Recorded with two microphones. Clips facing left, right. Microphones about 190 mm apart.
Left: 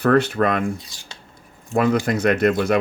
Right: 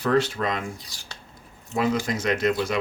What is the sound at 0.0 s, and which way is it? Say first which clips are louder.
Speech: left 5 dB; 60° left (ahead or behind).